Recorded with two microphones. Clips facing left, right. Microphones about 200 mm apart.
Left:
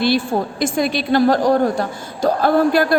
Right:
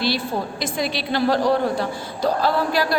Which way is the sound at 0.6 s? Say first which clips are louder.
Left 6 dB; 50° left (ahead or behind).